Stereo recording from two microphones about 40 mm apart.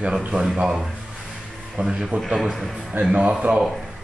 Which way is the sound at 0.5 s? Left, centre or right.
Centre.